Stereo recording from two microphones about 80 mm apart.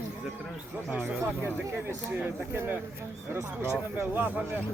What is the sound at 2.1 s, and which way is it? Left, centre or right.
Speech, right.